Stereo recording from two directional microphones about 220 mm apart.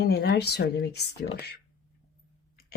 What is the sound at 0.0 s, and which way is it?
Speech, 45° left (ahead or behind).